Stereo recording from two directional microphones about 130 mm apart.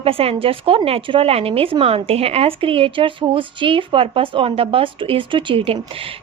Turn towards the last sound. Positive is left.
turn(degrees=-40)  # may be behind; listen again after turning